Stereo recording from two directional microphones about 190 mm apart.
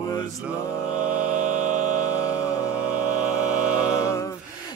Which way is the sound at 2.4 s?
15° left (ahead or behind).